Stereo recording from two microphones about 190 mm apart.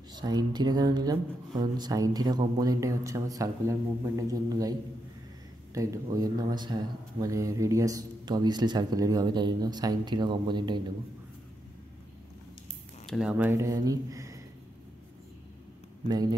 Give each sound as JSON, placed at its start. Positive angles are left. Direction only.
{"t": 0.1, "sound": "speech", "side_deg": -20}
{"t": 5.8, "sound": "speech", "side_deg": -20}
{"t": 13.0, "sound": "speech", "side_deg": 0}
{"t": 16.1, "sound": "speech", "side_deg": -20}